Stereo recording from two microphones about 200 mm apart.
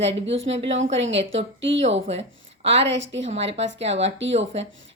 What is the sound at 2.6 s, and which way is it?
Speech, 30° right (ahead or behind).